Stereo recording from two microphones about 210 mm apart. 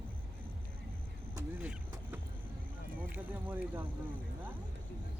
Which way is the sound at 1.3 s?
10° right (ahead or behind).